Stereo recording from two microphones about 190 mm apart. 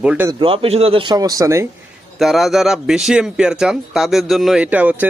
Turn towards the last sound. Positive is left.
turn(degrees=-10)  # may be behind; listen again after turning